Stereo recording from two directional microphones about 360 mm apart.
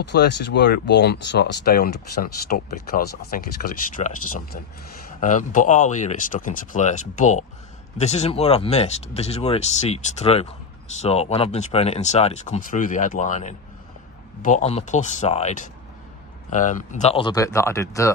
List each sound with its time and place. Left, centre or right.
0.0 s speech: left; by 18.1 s centre